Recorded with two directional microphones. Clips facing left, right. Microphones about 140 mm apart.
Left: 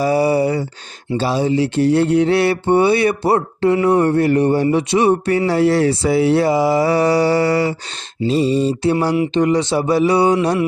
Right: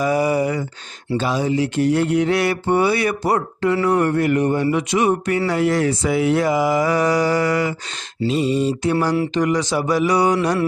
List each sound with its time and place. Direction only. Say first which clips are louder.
0.0 s a sound: left 3 dB; 30° left (ahead or behind)
1.1 s mantra: left 3 dB; 30° left (ahead or behind)
5.5 s speech: left 4 dB; 30° left (ahead or behind)
9.3 s mantra: left 3 dB; 25° left (ahead or behind)